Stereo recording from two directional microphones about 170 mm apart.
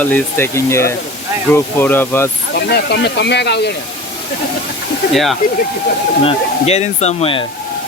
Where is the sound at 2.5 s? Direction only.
75° left (ahead or behind).